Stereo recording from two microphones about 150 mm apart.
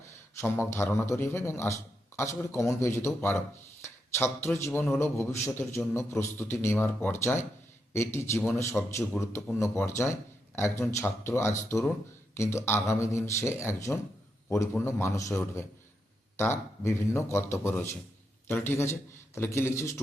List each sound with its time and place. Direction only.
0.3 s speech: 15° left (ahead or behind)